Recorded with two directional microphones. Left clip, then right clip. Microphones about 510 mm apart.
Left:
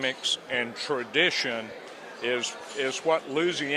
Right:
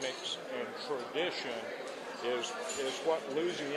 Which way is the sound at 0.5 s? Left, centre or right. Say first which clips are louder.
Left 9 dB; left.